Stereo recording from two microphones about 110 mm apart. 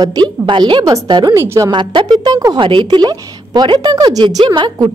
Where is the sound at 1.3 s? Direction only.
25° right (ahead or behind).